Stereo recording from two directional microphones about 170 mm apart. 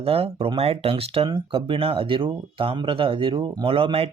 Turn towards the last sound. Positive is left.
turn(degrees=-35)  # may be behind; listen again after turning